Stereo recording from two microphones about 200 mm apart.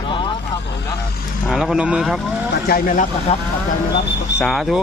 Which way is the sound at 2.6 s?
45° left (ahead or behind).